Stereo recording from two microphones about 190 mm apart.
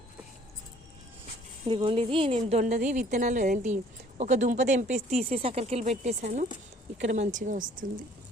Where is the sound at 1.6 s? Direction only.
25° right (ahead or behind); by 7.9 s 45° right (ahead or behind).